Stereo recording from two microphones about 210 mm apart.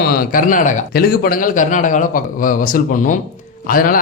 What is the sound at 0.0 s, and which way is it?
Speech, 45° left (ahead or behind).